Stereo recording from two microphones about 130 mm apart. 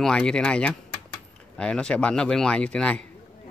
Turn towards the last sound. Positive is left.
turn(degrees=10)  # may be behind; listen again after turning